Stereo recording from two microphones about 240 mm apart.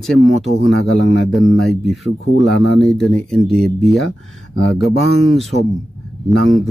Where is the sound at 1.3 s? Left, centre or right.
Centre.